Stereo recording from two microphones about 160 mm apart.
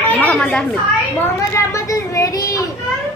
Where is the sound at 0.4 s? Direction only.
5° left (ahead or behind).